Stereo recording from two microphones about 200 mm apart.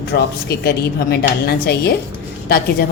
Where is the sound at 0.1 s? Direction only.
50° left (ahead or behind).